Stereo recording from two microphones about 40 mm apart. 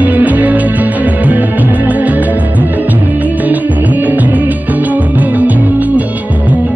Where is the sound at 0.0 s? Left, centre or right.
Right.